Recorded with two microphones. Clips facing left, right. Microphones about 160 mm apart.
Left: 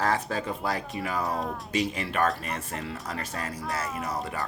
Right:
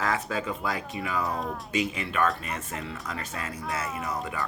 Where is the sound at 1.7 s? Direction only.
40° left (ahead or behind).